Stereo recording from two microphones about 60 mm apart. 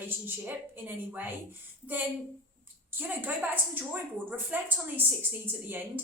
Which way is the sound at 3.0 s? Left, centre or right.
Right.